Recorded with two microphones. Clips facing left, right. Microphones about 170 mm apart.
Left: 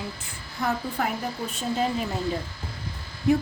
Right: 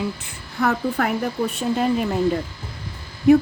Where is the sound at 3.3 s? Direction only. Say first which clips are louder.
Right 8 dB; 65° right (ahead or behind).